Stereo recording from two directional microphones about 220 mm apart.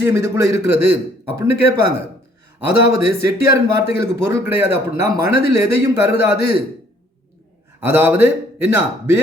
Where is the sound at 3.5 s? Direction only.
45° left (ahead or behind).